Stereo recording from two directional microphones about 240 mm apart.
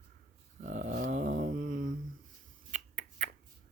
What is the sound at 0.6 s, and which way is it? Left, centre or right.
Dog, right.